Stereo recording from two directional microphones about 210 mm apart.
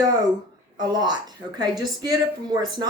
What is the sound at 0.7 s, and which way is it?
A woman's voice, 20° right (ahead or behind).